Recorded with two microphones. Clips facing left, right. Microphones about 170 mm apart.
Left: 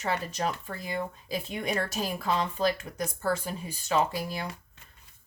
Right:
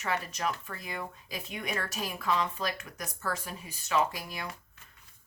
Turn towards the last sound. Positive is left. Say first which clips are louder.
# left 3 dB
turn(degrees=30)  # may be behind; listen again after turning